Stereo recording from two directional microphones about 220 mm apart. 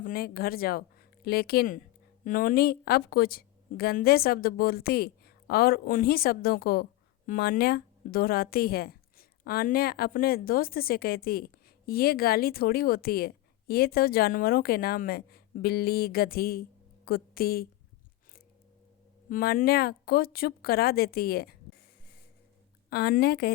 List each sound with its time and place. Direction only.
0.0 s a woman's voice: 40° left (ahead or behind)
19.3 s speech: 40° left (ahead or behind)
22.9 s speech: 45° left (ahead or behind)